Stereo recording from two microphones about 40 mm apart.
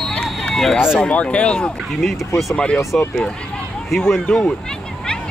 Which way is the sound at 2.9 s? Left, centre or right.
Left.